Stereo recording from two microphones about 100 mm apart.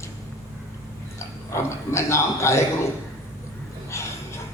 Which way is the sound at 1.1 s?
25° left (ahead or behind).